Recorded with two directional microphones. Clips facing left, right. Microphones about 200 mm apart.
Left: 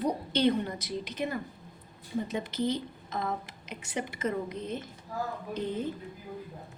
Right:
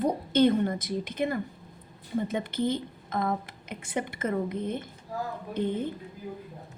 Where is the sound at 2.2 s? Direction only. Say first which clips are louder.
Right 2 dB; 55° right (ahead or behind).